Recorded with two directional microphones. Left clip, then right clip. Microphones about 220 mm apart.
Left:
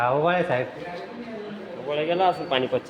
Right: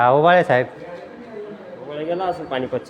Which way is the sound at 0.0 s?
55° right (ahead or behind).